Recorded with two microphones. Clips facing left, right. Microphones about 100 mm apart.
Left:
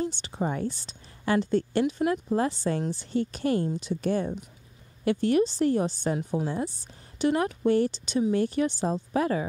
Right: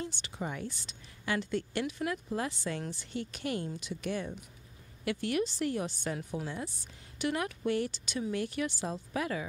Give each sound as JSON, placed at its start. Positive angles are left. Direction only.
{"t": 0.0, "sound": "a woman's voice", "side_deg": 35}